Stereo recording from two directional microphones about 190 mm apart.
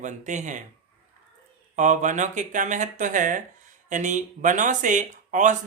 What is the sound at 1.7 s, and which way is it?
Speech, 40° right (ahead or behind).